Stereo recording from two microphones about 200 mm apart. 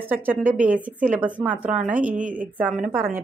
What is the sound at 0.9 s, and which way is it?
Speech, 40° right (ahead or behind).